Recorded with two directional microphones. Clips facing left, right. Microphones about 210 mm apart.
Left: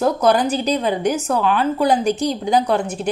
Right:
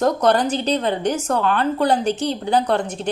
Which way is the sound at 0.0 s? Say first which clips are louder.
Left 1 dB; 10° left (ahead or behind).